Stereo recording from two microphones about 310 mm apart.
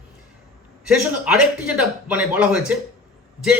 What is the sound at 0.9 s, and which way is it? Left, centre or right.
A man's voice, centre.